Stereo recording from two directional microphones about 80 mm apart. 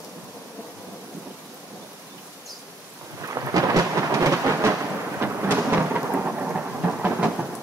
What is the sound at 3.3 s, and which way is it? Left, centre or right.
Thunder, right.